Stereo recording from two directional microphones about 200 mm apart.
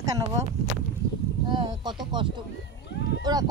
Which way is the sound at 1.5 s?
25° right (ahead or behind).